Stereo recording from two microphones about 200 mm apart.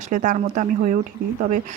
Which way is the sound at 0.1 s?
40° right (ahead or behind).